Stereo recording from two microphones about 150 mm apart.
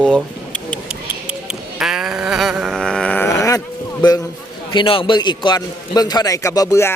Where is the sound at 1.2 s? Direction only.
5° right (ahead or behind); by 4.2 s 30° left (ahead or behind).